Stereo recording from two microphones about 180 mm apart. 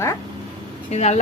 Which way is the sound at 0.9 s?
35° left (ahead or behind).